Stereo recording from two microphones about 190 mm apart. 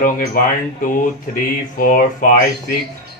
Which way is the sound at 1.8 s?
45° left (ahead or behind).